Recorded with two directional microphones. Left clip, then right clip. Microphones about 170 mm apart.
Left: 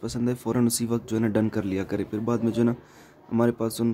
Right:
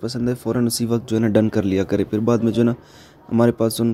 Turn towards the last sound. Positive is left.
turn(degrees=-25)  # may be behind; listen again after turning